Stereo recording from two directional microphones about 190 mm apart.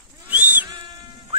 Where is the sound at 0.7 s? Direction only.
25° right (ahead or behind).